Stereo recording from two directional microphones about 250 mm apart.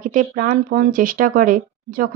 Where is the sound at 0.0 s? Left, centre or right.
Right.